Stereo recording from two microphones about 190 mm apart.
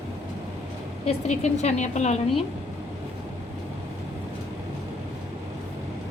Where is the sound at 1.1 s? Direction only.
35° left (ahead or behind).